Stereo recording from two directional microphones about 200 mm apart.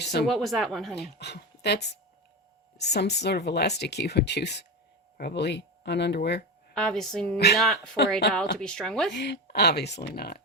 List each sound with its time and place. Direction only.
0.0 s speech: 55° left (ahead or behind)
0.3 s speech: centre (ahead or behind)
0.9 s speech: 55° left (ahead or behind)
6.7 s speech: centre (ahead or behind)
7.3 s speech: 55° left (ahead or behind)
8.3 s speech: 5° left (ahead or behind)
9.1 s speech: 60° left (ahead or behind)